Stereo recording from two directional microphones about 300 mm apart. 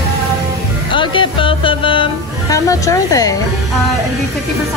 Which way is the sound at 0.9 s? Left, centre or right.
Centre.